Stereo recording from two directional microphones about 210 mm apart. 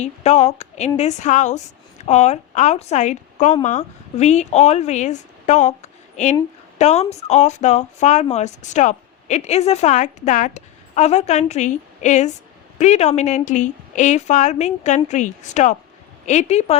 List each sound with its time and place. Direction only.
0.0 s a woman's voice: 35° left (ahead or behind)